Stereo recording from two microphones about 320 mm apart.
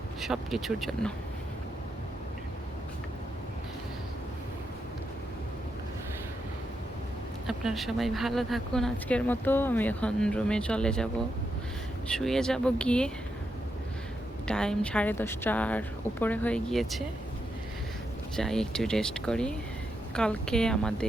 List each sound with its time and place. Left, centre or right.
0.2 s speech: centre
7.4 s speech: centre
14.4 s speech: centre
18.3 s speech: centre